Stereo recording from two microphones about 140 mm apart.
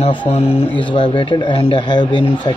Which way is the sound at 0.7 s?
35° left (ahead or behind).